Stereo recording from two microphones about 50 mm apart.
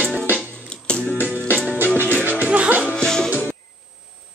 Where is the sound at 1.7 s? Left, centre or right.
Right.